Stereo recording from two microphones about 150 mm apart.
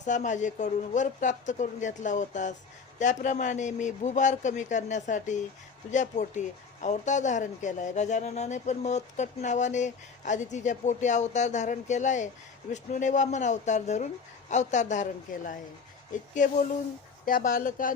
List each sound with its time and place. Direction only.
0.0 s speech: 55° left (ahead or behind)
17.2 s speech: 65° left (ahead or behind)